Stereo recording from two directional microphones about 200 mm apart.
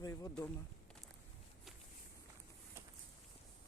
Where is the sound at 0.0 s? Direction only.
15° left (ahead or behind).